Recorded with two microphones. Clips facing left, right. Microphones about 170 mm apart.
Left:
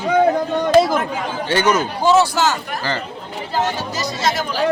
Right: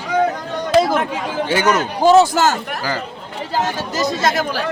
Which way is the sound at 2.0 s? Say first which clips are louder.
Right 4 dB; 45° right (ahead or behind).